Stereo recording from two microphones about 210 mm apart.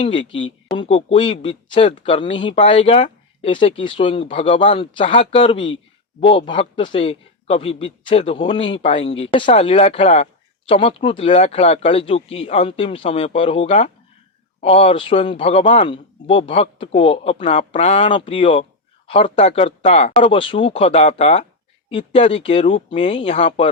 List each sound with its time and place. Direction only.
0.0 s speech: 25° left (ahead or behind)